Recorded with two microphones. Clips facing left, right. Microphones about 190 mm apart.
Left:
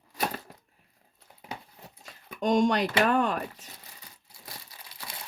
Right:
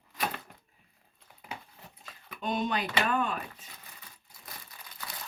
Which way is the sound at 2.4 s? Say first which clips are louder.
Left 8 dB; 90° left.